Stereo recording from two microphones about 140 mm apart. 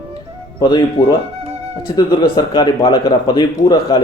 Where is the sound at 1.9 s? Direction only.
35° left (ahead or behind).